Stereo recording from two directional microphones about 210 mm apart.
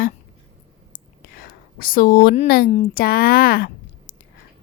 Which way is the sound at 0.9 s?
45° left (ahead or behind).